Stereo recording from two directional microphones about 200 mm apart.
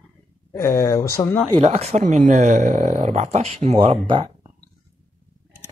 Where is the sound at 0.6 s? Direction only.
15° left (ahead or behind).